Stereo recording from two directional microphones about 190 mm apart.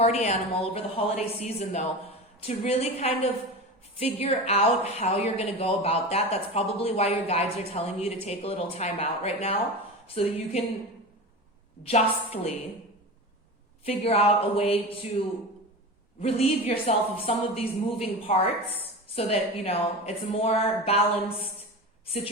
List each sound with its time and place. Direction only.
0.0 s speech: 35° left (ahead or behind)
11.8 s speech: 30° left (ahead or behind)
13.8 s speech: 30° left (ahead or behind)
16.2 s speech: 30° left (ahead or behind)